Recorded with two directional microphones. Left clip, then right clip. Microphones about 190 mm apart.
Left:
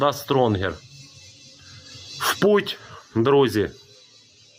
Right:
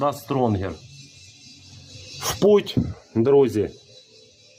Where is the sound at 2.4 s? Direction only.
Centre (ahead or behind).